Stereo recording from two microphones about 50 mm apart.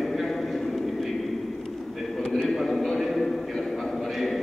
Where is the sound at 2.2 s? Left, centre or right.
Centre.